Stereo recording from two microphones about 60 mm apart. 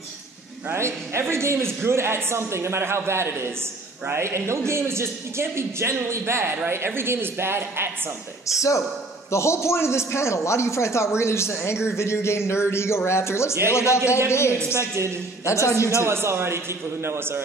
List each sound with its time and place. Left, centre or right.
0.7 s a man's voice: right
8.5 s a man's voice: left
9.3 s a man's voice: left
15.4 s a man's voice: left
16.0 s a man's voice: right